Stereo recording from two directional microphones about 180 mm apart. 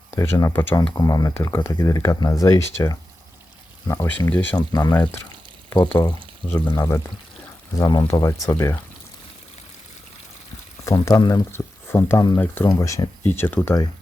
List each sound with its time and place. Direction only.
0.2 s speech: 20° left (ahead or behind)
4.5 s speech: 20° left (ahead or behind)
10.8 s speech: 20° left (ahead or behind)